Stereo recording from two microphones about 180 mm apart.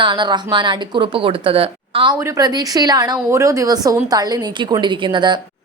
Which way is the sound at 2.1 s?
15° right (ahead or behind).